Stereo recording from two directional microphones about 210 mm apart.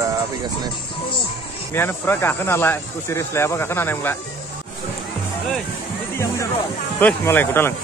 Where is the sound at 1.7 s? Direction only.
10° left (ahead or behind).